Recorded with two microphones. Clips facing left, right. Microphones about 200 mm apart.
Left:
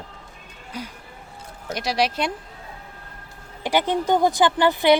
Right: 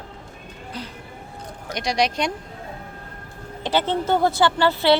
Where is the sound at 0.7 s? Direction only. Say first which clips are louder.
Left 2 dB; 10° left (ahead or behind).